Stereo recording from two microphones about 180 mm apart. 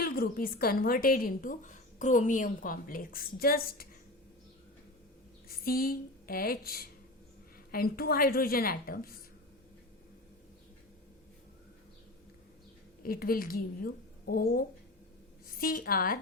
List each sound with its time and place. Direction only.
0.0 s a woman's voice: 55° left (ahead or behind)
5.5 s a woman's voice: 55° left (ahead or behind)
13.0 s a woman's voice: 55° left (ahead or behind)